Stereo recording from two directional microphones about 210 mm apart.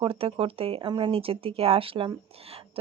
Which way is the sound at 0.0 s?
25° right (ahead or behind).